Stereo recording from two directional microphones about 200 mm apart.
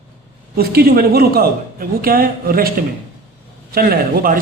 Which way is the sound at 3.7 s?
50° right (ahead or behind).